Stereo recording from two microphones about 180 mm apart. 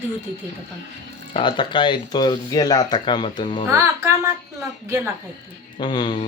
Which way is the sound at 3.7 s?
15° right (ahead or behind).